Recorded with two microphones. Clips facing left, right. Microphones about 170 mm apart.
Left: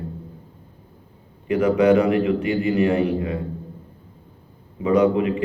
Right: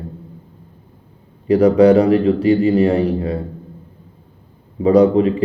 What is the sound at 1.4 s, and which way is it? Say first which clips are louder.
A man's voice: right 6 dB; 35° right (ahead or behind).